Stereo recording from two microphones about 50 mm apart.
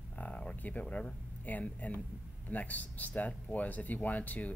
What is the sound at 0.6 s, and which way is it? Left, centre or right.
Speech, left.